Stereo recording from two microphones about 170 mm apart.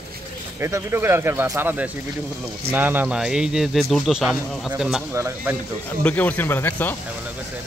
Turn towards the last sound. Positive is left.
turn(degrees=10)  # may be behind; listen again after turning